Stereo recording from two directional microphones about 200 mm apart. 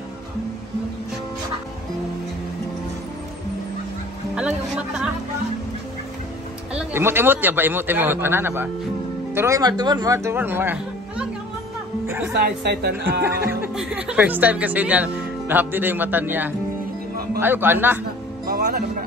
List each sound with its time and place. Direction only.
4.4 s vehicle: 5° right (ahead or behind)
6.7 s speech: 10° right (ahead or behind)
12.4 s speech: 55° right (ahead or behind)
13.5 s speech: 10° right (ahead or behind)
18.5 s speech: 45° right (ahead or behind)